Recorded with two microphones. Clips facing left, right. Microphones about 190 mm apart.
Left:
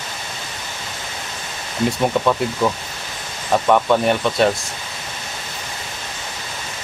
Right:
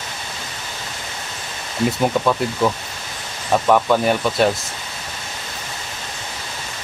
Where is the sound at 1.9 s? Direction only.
Centre (ahead or behind).